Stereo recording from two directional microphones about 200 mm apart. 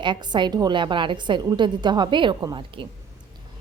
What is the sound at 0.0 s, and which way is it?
A woman's voice, 20° right (ahead or behind).